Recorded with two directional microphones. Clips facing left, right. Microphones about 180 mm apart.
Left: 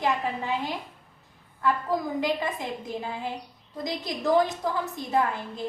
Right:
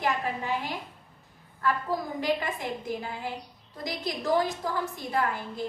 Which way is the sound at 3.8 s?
20° left (ahead or behind).